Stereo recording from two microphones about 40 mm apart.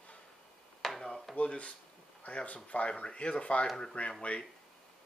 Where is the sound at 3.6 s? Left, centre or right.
Centre.